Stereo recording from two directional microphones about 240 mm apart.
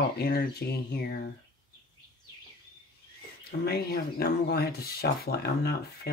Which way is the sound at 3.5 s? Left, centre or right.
Left.